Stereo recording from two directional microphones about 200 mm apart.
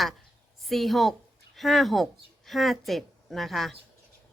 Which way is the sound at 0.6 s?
Centre (ahead or behind).